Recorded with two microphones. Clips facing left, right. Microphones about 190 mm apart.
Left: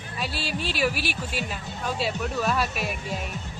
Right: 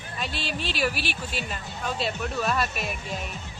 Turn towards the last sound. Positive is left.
turn(degrees=5)  # may be behind; listen again after turning